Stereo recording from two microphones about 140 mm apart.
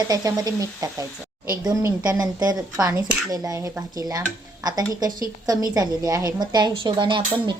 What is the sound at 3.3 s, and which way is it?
A woman's voice, 25° right (ahead or behind).